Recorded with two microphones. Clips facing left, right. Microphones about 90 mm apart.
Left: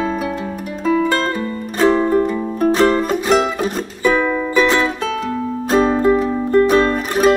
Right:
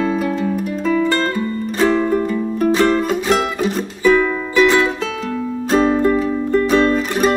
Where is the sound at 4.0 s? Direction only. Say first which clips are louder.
Right 2 dB; 15° left (ahead or behind).